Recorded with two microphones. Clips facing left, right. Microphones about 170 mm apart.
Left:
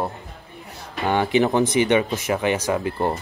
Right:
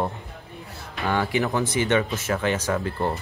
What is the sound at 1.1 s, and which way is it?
Speech, 20° left (ahead or behind).